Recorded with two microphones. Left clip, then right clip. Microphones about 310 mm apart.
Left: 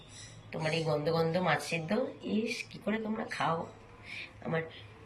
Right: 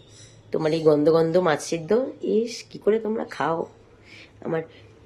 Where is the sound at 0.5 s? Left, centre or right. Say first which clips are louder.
Right 13 dB; right.